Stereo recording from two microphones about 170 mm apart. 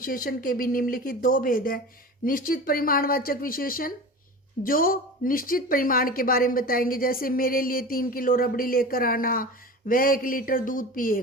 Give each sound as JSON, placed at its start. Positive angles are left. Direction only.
{"t": 0.0, "sound": "speech", "side_deg": 55}